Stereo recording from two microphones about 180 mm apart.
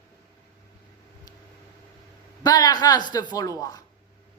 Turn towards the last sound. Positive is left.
turn(degrees=20)  # may be behind; listen again after turning